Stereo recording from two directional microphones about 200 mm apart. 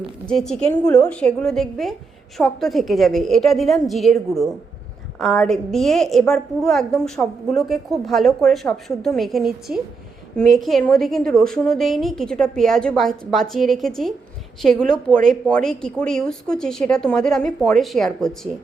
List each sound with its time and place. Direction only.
0.3 s a woman's voice: 5° left (ahead or behind)